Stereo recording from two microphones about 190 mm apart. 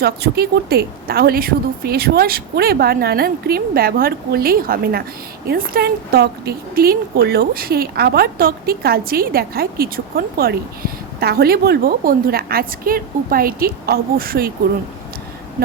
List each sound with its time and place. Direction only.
0.0 s a woman's voice: 55° right (ahead or behind)